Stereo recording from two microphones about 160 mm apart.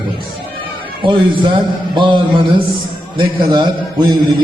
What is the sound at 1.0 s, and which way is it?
A man's voice, 30° right (ahead or behind).